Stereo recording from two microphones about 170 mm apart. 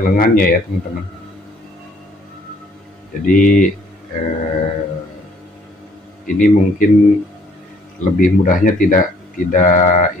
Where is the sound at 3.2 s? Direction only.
55° left (ahead or behind).